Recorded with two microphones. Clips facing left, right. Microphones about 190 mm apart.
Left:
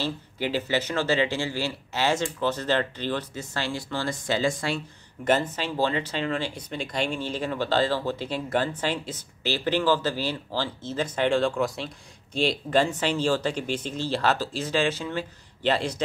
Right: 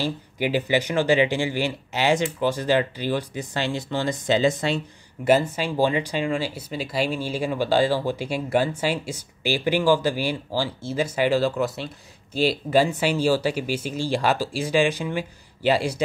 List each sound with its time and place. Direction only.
0.0 s speech: 15° right (ahead or behind)
5.2 s speech: 10° right (ahead or behind)